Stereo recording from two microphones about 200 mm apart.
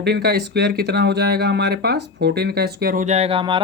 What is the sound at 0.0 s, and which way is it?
Speech, 55° right (ahead or behind).